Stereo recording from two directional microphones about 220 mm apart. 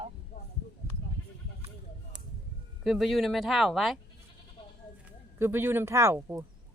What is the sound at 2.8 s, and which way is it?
Speech, centre (ahead or behind).